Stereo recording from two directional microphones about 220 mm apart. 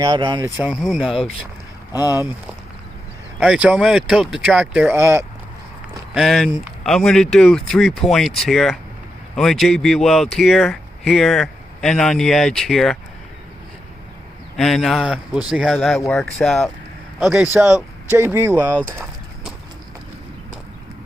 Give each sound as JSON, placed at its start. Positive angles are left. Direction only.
{"t": 0.0, "sound": "speech", "side_deg": -20}
{"t": 0.5, "sound": "speech", "side_deg": -5}
{"t": 3.4, "sound": "speech", "side_deg": -5}
{"t": 6.1, "sound": "speech", "side_deg": 0}
{"t": 14.5, "sound": "speech", "side_deg": 0}